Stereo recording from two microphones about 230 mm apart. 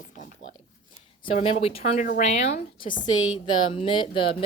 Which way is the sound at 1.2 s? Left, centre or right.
Left.